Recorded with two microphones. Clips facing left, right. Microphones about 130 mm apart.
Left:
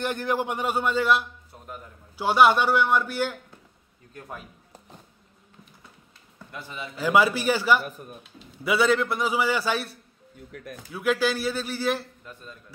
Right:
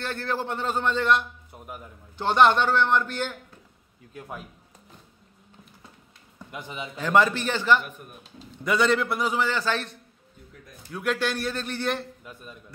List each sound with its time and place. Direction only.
0.0 s a man's voice: 15° left (ahead or behind)
4.1 s a man's voice: 5° right (ahead or behind)
6.5 s a man's voice: 15° right (ahead or behind)
7.0 s a man's voice: 5° left (ahead or behind)
10.5 s a man's voice: 80° left
10.9 s a man's voice: centre (ahead or behind)
12.3 s a man's voice: 10° right (ahead or behind)